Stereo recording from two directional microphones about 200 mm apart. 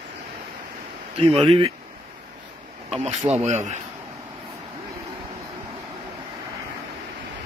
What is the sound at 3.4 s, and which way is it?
Speech, 35° right (ahead or behind).